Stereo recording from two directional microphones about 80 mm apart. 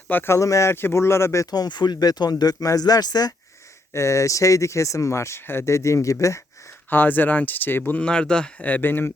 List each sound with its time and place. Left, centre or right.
0.1 s speech: left
0.3 s speech: left
1.5 s speech: left
3.9 s speech: left
6.9 s speech: left
8.0 s speech: centre